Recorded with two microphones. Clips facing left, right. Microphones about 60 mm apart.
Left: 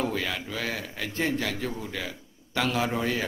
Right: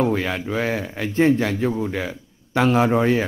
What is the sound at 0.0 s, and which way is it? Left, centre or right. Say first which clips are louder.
A man's voice: right 8 dB; right.